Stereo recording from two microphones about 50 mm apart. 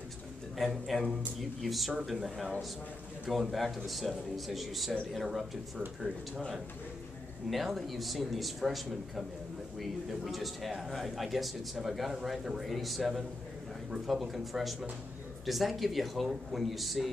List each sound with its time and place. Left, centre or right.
0.6 s a man's voice: centre
3.5 s a man's voice: centre
7.4 s a man's voice: centre